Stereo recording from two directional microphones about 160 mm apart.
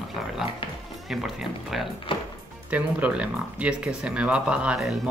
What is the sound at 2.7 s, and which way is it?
Speech, 10° right (ahead or behind).